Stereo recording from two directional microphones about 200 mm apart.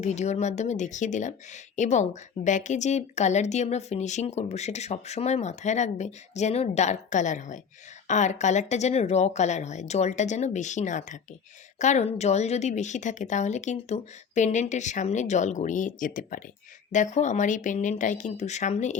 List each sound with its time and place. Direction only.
0.0 s a woman's voice: 35° left (ahead or behind)